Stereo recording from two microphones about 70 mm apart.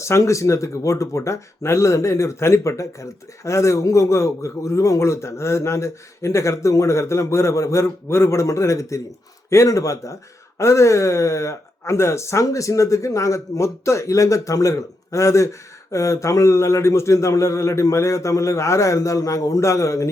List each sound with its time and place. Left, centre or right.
0.0 s speech: left